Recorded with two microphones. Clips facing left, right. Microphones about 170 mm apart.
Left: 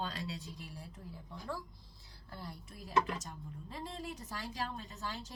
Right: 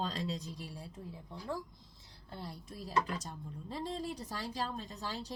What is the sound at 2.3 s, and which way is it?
A woman's voice, 30° right (ahead or behind).